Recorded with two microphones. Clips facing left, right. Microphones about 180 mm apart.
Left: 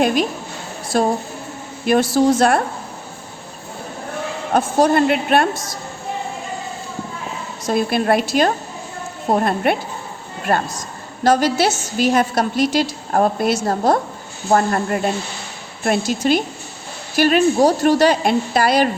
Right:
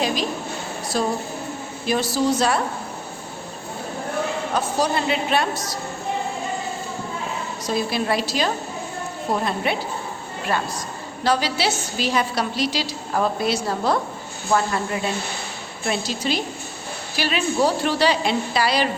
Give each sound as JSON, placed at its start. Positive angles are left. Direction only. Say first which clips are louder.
{"t": 0.0, "sound": "a woman's voice", "louder": "left 6 dB", "side_deg": 55}
{"t": 2.1, "sound": "a woman's voice", "louder": "left 4 dB", "side_deg": 55}
{"t": 4.5, "sound": "a woman's voice", "louder": "left 9 dB", "side_deg": 55}
{"t": 7.7, "sound": "a woman's voice", "louder": "left 6 dB", "side_deg": 55}